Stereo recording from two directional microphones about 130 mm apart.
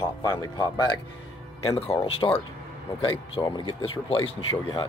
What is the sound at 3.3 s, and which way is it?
Speech, 35° left (ahead or behind).